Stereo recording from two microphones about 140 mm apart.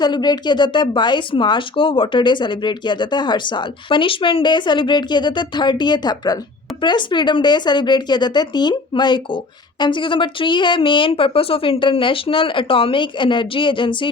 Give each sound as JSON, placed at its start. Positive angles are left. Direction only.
{"t": 0.0, "sound": "speech", "side_deg": 30}